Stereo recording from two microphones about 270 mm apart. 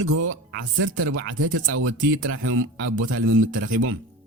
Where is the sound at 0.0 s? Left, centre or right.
Right.